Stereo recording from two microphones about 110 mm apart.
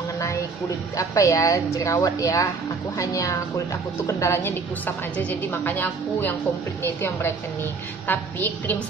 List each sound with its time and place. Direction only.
0.9 s a woman's voice: 30° left (ahead or behind)